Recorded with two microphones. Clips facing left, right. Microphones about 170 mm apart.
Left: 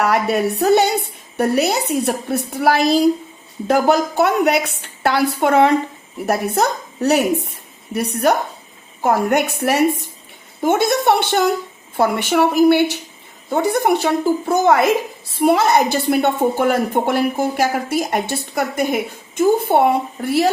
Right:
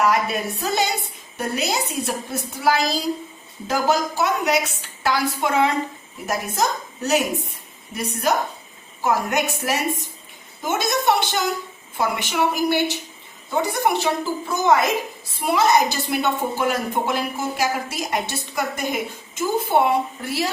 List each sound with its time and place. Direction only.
0.0 s a woman's voice: 65° left (ahead or behind)